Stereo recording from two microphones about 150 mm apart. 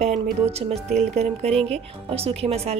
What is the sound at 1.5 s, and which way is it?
Speech, 5° left (ahead or behind).